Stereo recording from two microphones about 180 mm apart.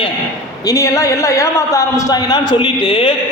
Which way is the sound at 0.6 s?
15° left (ahead or behind).